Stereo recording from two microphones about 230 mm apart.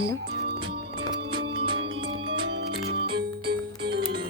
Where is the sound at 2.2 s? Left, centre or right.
Right.